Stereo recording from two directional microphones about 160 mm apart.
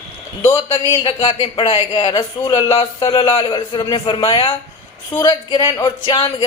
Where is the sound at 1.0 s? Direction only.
30° left (ahead or behind).